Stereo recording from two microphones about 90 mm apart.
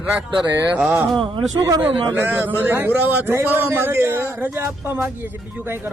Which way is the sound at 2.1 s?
20° right (ahead or behind).